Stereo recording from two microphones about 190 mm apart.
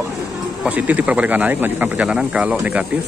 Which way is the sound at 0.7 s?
10° right (ahead or behind).